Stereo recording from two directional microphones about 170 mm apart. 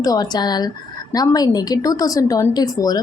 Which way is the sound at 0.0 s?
20° left (ahead or behind).